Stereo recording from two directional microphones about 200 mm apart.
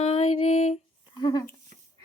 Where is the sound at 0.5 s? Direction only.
35° left (ahead or behind).